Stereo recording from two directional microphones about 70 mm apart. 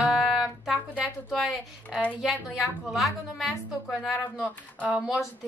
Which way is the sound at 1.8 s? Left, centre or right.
Centre.